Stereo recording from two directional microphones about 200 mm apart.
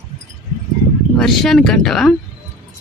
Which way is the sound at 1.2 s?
Centre (ahead or behind).